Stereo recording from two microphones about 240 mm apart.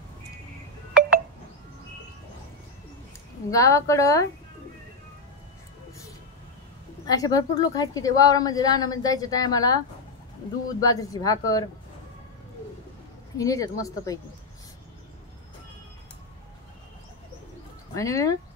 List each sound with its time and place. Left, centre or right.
3.4 s a woman's voice: centre
7.1 s a woman's voice: centre
10.8 s a woman's voice: centre
13.4 s a woman's voice: centre
17.9 s a woman's voice: centre